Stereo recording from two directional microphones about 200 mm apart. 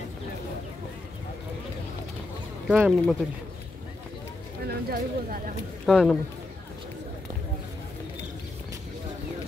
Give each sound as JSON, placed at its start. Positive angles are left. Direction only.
{"t": 2.7, "sound": "speech", "side_deg": -5}
{"t": 4.6, "sound": "speech", "side_deg": -50}
{"t": 5.9, "sound": "speech", "side_deg": 0}